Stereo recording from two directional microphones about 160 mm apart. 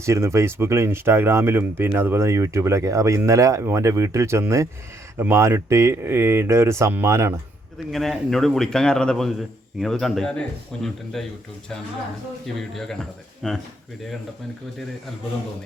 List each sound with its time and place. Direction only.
0.0 s speech: 15° right (ahead or behind)
7.9 s a man's voice: centre (ahead or behind)
12.7 s a man's voice: centre (ahead or behind)